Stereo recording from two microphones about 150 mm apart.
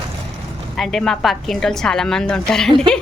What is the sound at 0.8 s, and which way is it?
A woman's voice, centre (ahead or behind).